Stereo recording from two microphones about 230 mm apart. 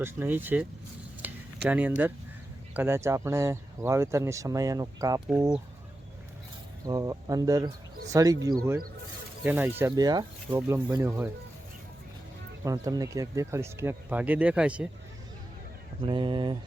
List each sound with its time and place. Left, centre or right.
0.0 s speech: centre
1.2 s a sound: centre
1.6 s speech: centre
6.8 s speech: centre
12.6 s speech: centre
16.0 s speech: centre